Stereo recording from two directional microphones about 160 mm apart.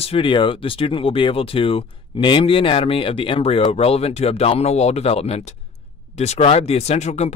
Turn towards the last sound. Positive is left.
turn(degrees=45)  # may be behind; listen again after turning